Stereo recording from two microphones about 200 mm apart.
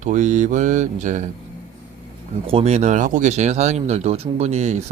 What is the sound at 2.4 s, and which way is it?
Speech, 30° right (ahead or behind).